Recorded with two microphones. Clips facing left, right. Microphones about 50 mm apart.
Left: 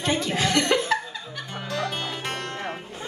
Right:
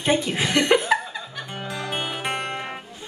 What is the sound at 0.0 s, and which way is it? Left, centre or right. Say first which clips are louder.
Speech: right 2 dB; right.